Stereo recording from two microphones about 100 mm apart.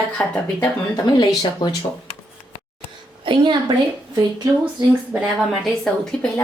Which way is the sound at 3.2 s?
55° right (ahead or behind).